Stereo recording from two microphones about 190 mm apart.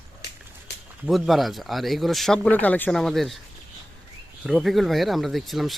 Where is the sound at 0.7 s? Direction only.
60° left (ahead or behind).